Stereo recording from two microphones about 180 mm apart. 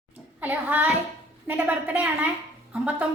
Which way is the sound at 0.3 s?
10° right (ahead or behind).